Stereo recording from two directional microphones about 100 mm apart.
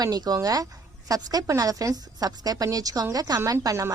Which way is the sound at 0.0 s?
40° right (ahead or behind).